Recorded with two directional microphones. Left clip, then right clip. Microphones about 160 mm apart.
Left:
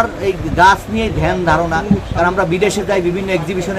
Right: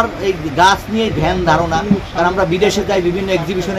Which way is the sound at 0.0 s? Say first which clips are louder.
Even; 5° right (ahead or behind).